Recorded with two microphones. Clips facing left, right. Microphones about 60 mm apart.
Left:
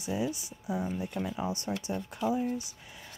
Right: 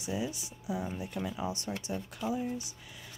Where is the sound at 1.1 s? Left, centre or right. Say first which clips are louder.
Left 2 dB; centre.